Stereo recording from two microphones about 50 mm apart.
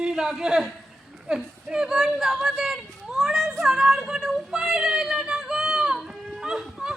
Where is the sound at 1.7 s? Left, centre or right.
Centre.